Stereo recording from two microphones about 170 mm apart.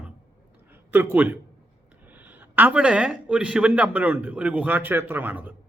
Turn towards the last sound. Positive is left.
turn(degrees=-10)  # may be behind; listen again after turning